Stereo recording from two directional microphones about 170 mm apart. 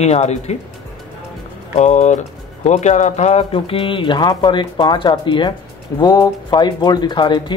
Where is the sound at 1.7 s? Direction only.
45° left (ahead or behind).